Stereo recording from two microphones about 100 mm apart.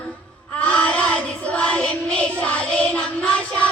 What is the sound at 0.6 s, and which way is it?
Child singing, 10° left (ahead or behind).